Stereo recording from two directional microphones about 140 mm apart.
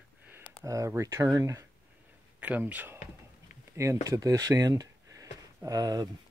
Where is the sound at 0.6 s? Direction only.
20° right (ahead or behind).